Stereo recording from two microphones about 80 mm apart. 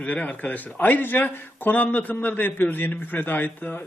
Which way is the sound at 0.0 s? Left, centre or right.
Centre.